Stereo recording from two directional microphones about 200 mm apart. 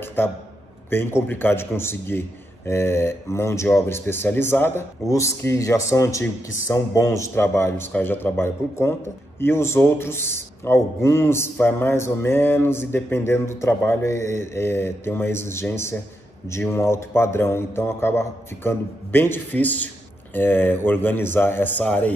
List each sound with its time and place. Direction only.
0.0 s a man's voice: 10° left (ahead or behind)